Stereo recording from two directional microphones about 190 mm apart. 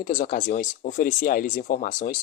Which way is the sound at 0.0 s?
45° left (ahead or behind).